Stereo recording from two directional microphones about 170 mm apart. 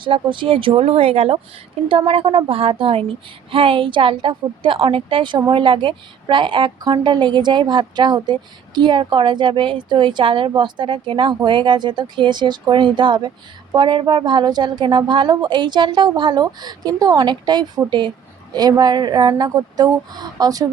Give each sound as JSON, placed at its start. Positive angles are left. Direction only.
{"t": 0.0, "sound": "a woman's voice", "side_deg": -30}